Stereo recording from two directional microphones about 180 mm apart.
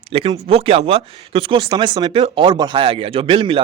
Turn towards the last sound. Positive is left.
turn(degrees=-30)  # may be behind; listen again after turning